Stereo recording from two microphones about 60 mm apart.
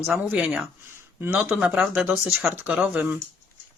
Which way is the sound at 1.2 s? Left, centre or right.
Right.